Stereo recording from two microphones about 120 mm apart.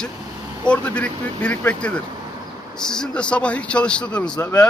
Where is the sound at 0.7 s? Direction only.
10° left (ahead or behind).